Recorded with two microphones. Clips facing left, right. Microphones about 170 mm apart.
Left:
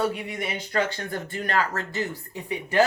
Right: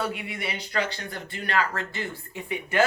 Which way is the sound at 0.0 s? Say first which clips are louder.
Left 4 dB; 40° left (ahead or behind).